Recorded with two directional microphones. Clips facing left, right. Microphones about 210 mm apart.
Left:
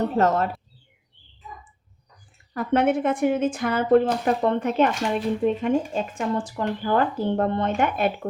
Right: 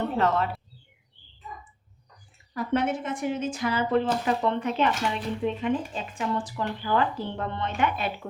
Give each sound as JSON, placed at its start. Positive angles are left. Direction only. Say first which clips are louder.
{"t": 0.2, "sound": "a woman's voice", "louder": "left 4 dB", "side_deg": 45}
{"t": 1.4, "sound": "bird", "louder": "even", "side_deg": 0}
{"t": 2.5, "sound": "a woman's voice", "louder": "left 5 dB", "side_deg": 60}